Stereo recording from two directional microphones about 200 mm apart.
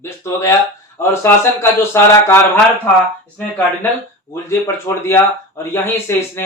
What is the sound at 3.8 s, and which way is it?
Speech, 10° left (ahead or behind).